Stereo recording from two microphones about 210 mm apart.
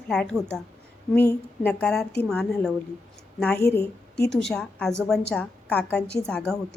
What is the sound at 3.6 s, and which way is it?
Speech, 50° left (ahead or behind).